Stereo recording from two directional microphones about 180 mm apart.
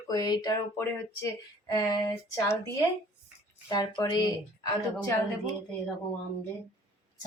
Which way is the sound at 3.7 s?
25° left (ahead or behind).